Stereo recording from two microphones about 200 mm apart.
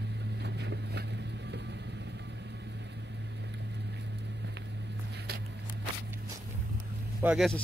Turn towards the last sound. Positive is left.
turn(degrees=0)  # may be behind; listen again after turning